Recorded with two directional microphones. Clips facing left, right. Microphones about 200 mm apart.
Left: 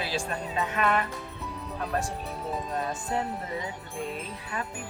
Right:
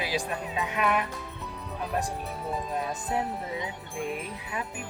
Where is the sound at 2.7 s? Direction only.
15° right (ahead or behind).